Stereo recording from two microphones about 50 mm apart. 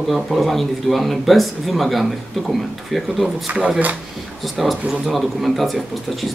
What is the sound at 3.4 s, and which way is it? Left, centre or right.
Speech, right.